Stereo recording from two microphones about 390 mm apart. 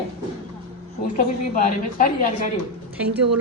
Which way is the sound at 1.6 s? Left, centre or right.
Left.